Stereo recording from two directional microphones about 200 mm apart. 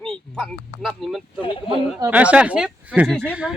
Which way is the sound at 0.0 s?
5° left (ahead or behind).